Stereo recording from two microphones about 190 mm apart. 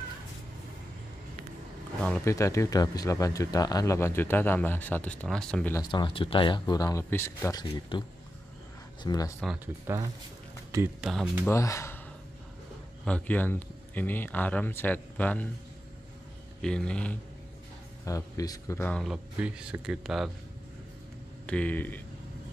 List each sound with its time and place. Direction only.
2.0 s a sound: 5° left (ahead or behind)
2.2 s speech: 15° left (ahead or behind)
5.8 s speech: 25° left (ahead or behind)
7.9 s speech: 25° left (ahead or behind)
9.9 s speech: 10° right (ahead or behind)
11.0 s speech: centre (ahead or behind)
11.5 s speech: 15° left (ahead or behind)
13.0 s speech: 5° left (ahead or behind)
16.6 s speech: 5° left (ahead or behind)
18.0 s speech: 15° left (ahead or behind); by 20.2 s centre (ahead or behind)
21.5 s speech: 5° left (ahead or behind)